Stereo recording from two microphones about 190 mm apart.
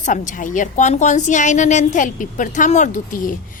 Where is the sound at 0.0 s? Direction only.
40° left (ahead or behind).